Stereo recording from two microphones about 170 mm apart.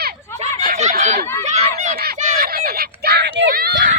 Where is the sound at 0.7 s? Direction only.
45° right (ahead or behind).